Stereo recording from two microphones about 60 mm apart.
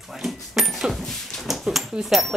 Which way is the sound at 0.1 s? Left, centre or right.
Centre.